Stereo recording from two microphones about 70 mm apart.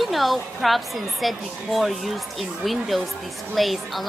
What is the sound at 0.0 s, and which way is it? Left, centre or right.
A woman's voice, centre.